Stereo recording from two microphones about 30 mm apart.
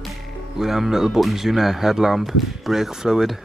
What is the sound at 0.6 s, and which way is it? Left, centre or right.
Speech, centre.